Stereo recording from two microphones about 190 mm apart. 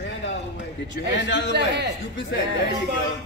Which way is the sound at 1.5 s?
60° right (ahead or behind).